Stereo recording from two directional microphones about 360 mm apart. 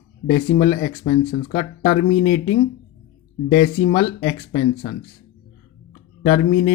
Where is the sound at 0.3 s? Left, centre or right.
Centre.